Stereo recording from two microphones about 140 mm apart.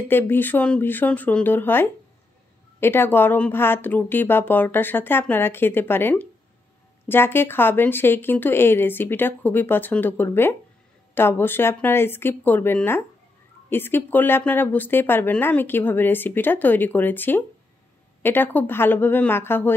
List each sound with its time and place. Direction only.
0.1 s a woman's voice: 15° left (ahead or behind)